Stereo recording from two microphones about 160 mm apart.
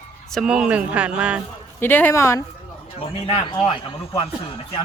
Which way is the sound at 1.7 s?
15° left (ahead or behind).